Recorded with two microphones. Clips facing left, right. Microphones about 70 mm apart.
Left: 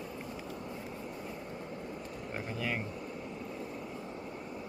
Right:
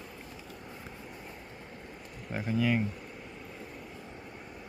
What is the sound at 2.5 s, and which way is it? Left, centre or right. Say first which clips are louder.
Speech: right 9 dB; centre.